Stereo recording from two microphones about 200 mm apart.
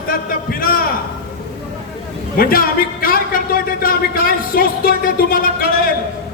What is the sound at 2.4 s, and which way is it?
A man's voice, 45° left (ahead or behind).